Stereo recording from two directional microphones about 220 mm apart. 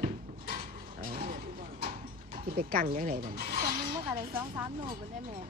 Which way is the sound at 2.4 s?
40° right (ahead or behind).